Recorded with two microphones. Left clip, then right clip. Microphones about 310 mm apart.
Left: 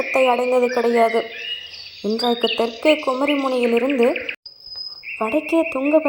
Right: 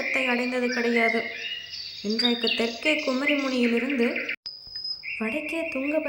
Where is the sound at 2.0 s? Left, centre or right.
Left.